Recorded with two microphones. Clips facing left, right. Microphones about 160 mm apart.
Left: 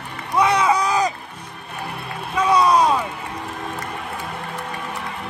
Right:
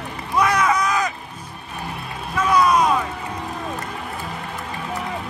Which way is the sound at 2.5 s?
30° left (ahead or behind).